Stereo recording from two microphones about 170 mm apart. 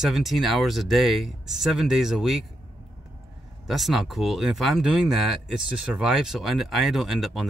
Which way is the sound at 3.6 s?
Centre (ahead or behind).